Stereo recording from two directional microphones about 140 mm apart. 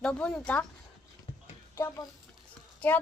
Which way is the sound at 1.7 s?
20° left (ahead or behind).